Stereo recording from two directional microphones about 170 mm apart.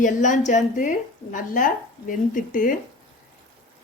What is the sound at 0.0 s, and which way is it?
A woman's voice, 45° left (ahead or behind).